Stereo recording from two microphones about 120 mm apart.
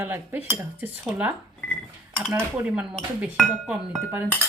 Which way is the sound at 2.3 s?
20° right (ahead or behind).